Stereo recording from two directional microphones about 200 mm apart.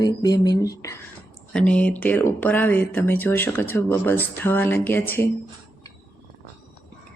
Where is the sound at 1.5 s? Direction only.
5° left (ahead or behind).